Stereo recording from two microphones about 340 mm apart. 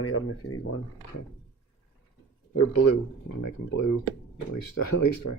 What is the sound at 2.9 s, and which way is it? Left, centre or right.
Speech, left.